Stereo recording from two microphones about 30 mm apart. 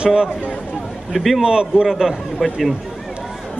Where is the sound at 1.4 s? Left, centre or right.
Right.